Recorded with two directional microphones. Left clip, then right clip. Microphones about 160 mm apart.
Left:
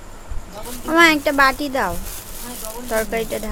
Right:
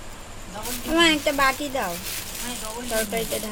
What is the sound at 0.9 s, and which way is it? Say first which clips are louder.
Speech: left 6 dB; 25° left (ahead or behind).